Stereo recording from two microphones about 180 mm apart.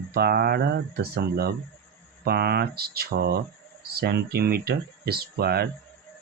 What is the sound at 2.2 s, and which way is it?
Speech, 60° right (ahead or behind).